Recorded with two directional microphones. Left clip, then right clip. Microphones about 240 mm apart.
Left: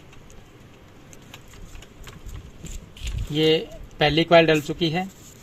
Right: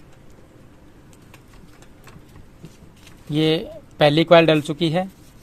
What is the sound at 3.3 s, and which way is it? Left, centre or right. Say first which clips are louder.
A man's voice: even; right.